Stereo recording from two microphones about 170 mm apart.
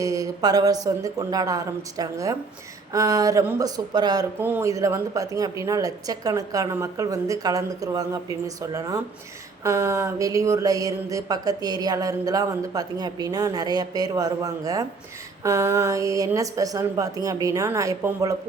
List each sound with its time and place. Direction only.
0.0 s speech: 20° right (ahead or behind)